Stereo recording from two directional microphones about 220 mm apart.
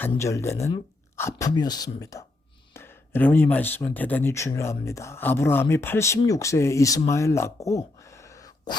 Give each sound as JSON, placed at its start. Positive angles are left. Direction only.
{"t": 0.2, "sound": "speech", "side_deg": 15}